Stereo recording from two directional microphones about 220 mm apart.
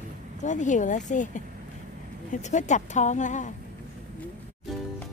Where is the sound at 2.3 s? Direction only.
35° left (ahead or behind).